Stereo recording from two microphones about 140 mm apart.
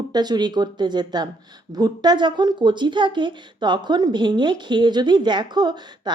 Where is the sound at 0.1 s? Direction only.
30° right (ahead or behind).